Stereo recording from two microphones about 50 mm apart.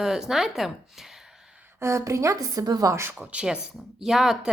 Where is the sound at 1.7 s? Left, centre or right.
Right.